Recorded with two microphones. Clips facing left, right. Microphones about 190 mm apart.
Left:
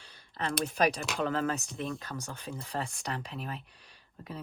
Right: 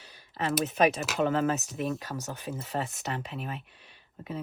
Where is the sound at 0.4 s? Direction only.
5° right (ahead or behind).